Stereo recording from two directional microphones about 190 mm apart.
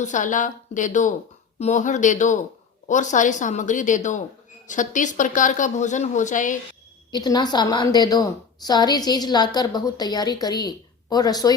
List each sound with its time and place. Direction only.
0.0 s a woman's voice: 40° left (ahead or behind)
7.1 s a woman's voice: 20° left (ahead or behind)